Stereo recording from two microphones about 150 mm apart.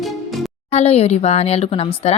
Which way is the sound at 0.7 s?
45° left (ahead or behind).